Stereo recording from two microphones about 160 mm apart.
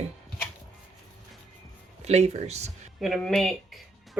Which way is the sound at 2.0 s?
45° right (ahead or behind).